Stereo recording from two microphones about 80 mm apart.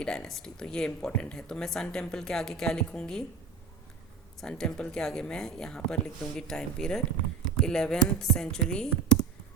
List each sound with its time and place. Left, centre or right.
0.0 s speech: centre
4.4 s speech: centre